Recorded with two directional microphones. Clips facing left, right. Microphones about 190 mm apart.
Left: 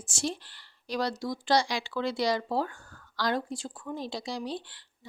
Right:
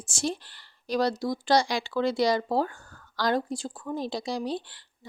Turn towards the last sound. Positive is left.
turn(degrees=-40)  # may be behind; listen again after turning